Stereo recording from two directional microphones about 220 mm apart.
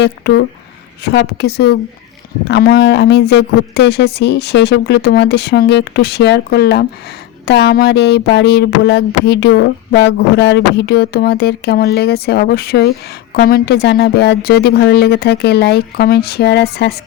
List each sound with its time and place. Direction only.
0.0 s speech: 50° left (ahead or behind)